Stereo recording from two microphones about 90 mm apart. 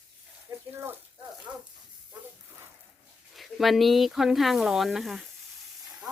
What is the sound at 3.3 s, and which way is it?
Speech, centre (ahead or behind).